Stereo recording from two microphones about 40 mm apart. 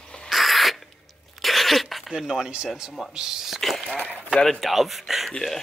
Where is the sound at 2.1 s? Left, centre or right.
Centre.